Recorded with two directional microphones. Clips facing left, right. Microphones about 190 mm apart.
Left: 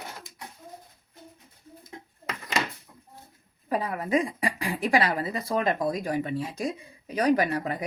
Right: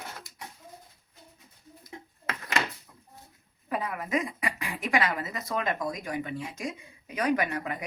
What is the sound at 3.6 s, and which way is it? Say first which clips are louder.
A woman's voice: left 4 dB; 35° left (ahead or behind).